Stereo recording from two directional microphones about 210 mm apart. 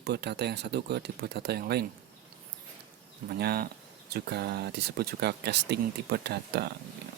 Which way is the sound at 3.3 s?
45° right (ahead or behind).